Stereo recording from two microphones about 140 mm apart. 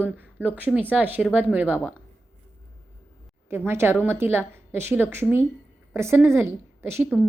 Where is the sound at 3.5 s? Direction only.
15° right (ahead or behind).